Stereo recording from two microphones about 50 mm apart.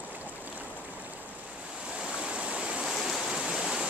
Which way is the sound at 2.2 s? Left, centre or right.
Right.